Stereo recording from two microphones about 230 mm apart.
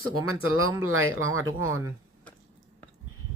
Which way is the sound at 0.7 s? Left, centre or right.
Centre.